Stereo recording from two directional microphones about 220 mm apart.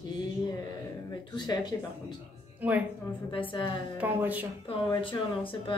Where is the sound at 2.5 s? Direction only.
5° right (ahead or behind).